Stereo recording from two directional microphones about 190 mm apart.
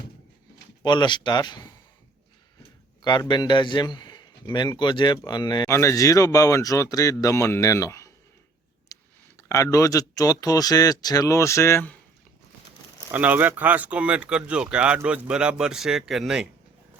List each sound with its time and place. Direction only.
0.8 s a man's voice: 25° left (ahead or behind)
3.0 s a man's voice: 25° left (ahead or behind)
8.9 s a sound: 20° left (ahead or behind)
9.5 s speech: 15° left (ahead or behind)
13.1 s speech: 10° right (ahead or behind)